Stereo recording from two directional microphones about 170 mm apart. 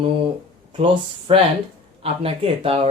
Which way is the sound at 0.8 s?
30° right (ahead or behind).